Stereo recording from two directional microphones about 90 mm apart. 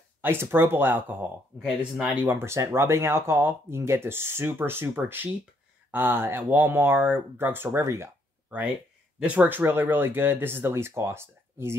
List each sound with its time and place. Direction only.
0.2 s speech: 25° right (ahead or behind)
8.5 s speech: 20° right (ahead or behind)